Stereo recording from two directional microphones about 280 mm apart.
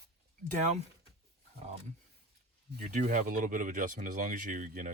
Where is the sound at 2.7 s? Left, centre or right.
Right.